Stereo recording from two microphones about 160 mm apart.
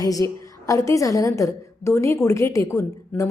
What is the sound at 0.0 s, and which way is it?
A woman's voice, 20° left (ahead or behind).